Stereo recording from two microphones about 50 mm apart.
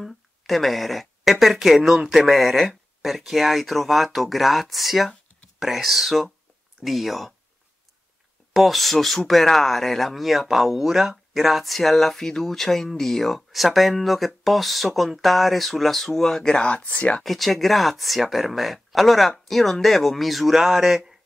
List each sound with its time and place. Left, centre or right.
0.0 s speech: centre
8.5 s speech: centre
16.6 s speech: left
17.2 s speech: centre